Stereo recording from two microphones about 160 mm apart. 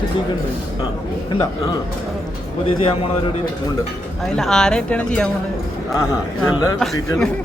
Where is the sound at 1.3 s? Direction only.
25° left (ahead or behind).